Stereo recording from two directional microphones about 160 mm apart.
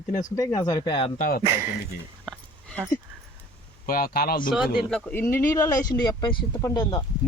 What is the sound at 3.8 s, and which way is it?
Speech, 65° left (ahead or behind).